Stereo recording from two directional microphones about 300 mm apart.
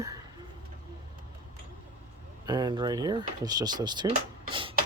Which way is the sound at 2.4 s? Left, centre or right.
Centre.